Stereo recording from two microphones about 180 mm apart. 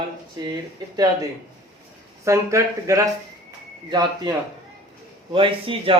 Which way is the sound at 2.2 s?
15° right (ahead or behind).